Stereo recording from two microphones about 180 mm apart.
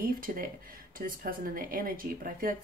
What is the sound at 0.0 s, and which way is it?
Speech, 50° right (ahead or behind).